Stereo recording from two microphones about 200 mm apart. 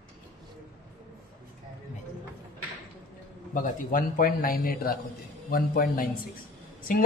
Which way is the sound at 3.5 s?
40° left (ahead or behind).